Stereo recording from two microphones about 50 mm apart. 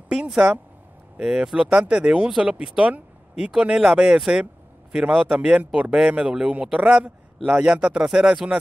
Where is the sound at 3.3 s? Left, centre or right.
Centre.